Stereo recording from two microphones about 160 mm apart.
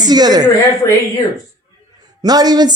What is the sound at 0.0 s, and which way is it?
Speech, 25° right (ahead or behind).